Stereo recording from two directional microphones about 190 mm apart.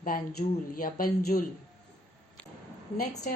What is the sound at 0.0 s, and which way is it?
A woman's voice, 45° left (ahead or behind).